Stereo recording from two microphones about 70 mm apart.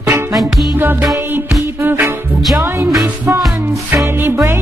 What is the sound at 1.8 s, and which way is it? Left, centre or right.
Music, right.